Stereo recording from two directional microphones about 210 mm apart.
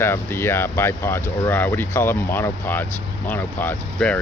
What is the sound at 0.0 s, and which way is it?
Speech, 10° left (ahead or behind).